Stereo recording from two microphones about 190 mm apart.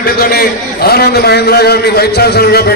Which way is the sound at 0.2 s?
50° left (ahead or behind).